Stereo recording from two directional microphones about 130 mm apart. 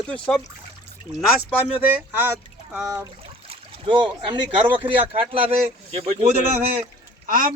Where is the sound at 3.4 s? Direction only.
50° right (ahead or behind).